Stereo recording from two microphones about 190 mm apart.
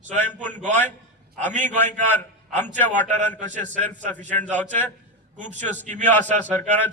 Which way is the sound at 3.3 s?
40° right (ahead or behind).